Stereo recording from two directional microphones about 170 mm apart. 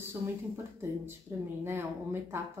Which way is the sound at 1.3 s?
15° right (ahead or behind).